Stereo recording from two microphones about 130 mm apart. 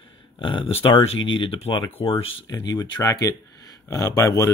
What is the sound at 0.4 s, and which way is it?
Speech, 40° left (ahead or behind).